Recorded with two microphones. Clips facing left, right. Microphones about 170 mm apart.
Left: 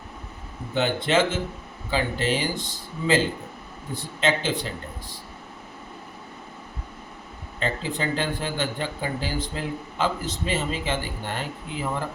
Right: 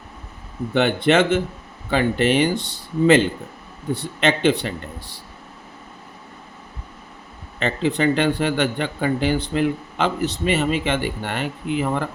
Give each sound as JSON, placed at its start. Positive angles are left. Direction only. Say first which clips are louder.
{"t": 0.7, "sound": "speech", "louder": "right 5 dB", "side_deg": -65}
{"t": 3.9, "sound": "a man's voice", "louder": "right 3 dB", "side_deg": -65}
{"t": 7.6, "sound": "a man's voice", "louder": "right 8 dB", "side_deg": -70}